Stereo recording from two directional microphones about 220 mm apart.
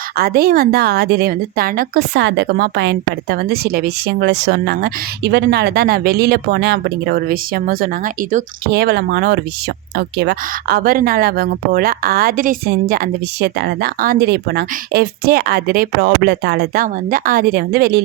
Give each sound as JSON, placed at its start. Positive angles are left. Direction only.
{"t": 0.2, "sound": "a woman's voice", "side_deg": -45}